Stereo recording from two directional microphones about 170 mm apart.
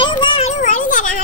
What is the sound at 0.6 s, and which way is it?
Speech, 50° left (ahead or behind).